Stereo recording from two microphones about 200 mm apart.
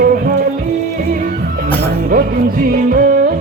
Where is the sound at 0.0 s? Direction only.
45° right (ahead or behind).